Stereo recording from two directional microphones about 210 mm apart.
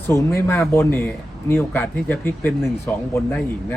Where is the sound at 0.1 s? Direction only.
15° left (ahead or behind).